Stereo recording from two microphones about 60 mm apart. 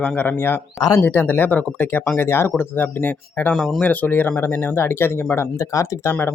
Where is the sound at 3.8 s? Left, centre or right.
Left.